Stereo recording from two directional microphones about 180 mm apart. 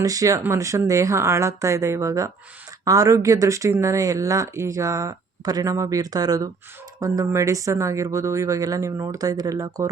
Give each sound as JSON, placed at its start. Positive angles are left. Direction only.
{"t": 0.0, "sound": "speech", "side_deg": -20}